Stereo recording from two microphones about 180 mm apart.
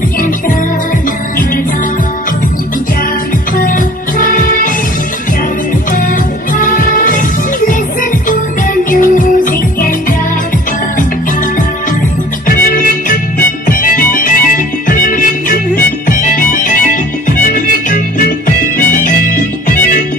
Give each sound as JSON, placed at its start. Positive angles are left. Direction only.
{"t": 3.5, "sound": "music", "side_deg": 50}
{"t": 6.5, "sound": "music", "side_deg": 50}
{"t": 8.9, "sound": "music", "side_deg": 50}
{"t": 12.4, "sound": "music", "side_deg": 50}